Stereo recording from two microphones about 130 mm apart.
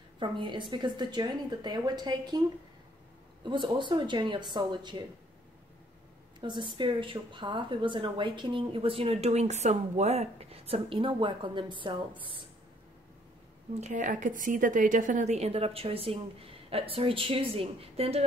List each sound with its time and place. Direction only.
0.2 s speech: 40° right (ahead or behind)
3.4 s speech: 35° right (ahead or behind)
6.4 s speech: 35° right (ahead or behind)
13.7 s a woman's voice: 70° right (ahead or behind); by 18.2 s 50° right (ahead or behind)